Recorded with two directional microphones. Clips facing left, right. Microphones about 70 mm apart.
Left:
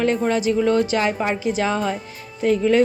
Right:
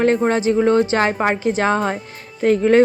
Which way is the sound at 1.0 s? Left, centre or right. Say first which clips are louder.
Right 3 dB; right.